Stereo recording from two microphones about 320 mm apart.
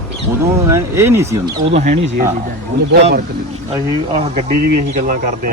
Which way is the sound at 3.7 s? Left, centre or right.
Centre.